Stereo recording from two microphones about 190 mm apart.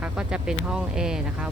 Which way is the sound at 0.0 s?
5° right (ahead or behind).